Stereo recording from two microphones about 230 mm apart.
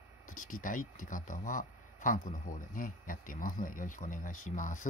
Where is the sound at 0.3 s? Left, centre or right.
Left.